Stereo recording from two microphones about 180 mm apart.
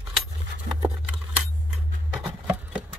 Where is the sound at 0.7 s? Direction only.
60° right (ahead or behind).